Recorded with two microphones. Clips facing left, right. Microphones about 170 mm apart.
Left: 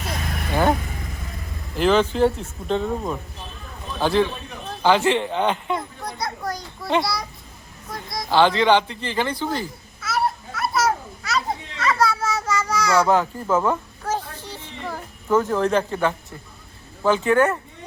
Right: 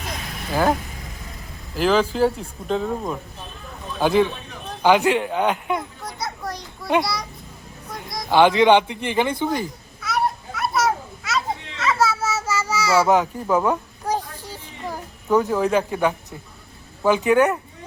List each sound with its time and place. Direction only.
0.5 s speech: centre (ahead or behind)
4.0 s speech: 15° right (ahead or behind)
4.8 s children playing: 15° right (ahead or behind)
7.0 s speech: centre (ahead or behind)
8.3 s speech: 15° right (ahead or behind)
10.0 s children playing: centre (ahead or behind)
13.1 s speech: 15° right (ahead or behind)
13.7 s a sound: 15° right (ahead or behind)
17.0 s speech: 15° right (ahead or behind)